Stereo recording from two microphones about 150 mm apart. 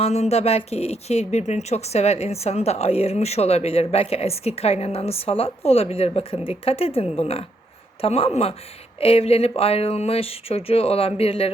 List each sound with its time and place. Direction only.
0.0 s speech: 45° left (ahead or behind)